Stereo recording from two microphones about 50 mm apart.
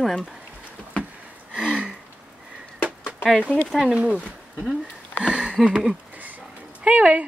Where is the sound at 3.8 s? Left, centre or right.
Centre.